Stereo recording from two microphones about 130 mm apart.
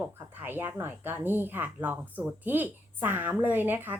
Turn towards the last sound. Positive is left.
turn(degrees=-15)  # may be behind; listen again after turning